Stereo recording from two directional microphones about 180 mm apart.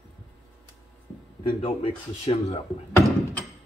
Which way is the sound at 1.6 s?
35° left (ahead or behind).